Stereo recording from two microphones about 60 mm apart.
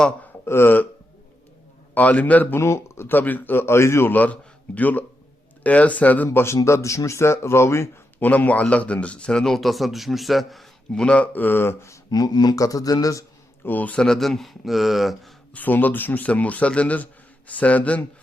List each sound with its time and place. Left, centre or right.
0.4 s speech: left
2.0 s a man's voice: left
2.6 s speech: left
3.1 s a man's voice: left
4.1 s a man's voice: left
6.3 s speech: left
8.2 s a man's voice: left; by 11.0 s centre
11.0 s a man's voice: centre
11.3 s a man's voice: left
12.1 s speech: left
13.7 s a man's voice: left
13.9 s a man's voice: centre
14.2 s speech: centre
15.5 s a man's voice: left